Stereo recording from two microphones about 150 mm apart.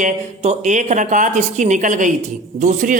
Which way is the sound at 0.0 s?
55° right (ahead or behind).